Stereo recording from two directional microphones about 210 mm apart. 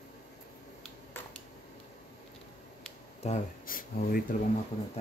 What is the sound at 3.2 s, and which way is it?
Speech, 40° left (ahead or behind).